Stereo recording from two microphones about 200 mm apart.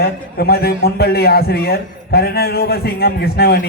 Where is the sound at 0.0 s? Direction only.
50° left (ahead or behind).